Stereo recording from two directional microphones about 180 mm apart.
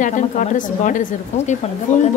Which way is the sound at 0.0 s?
45° left (ahead or behind).